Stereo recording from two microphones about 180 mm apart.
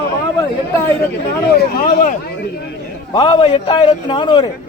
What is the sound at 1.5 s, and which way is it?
Speech, 50° left (ahead or behind).